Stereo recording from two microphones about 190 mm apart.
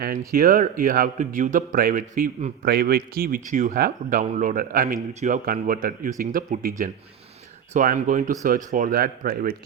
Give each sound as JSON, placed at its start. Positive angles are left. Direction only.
{"t": 0.3, "sound": "a man's voice", "side_deg": -50}